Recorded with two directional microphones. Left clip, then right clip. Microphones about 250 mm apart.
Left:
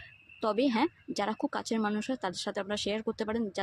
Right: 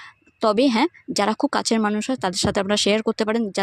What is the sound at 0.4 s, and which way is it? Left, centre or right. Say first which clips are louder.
Speech: right 10 dB; right.